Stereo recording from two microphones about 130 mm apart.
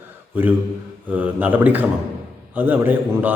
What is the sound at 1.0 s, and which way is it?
A man's voice, 10° right (ahead or behind).